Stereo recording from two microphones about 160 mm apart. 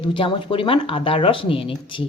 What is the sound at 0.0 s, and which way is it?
Speech, 30° left (ahead or behind).